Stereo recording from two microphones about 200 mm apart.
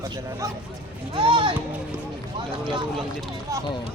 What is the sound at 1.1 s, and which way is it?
Speech, 25° right (ahead or behind).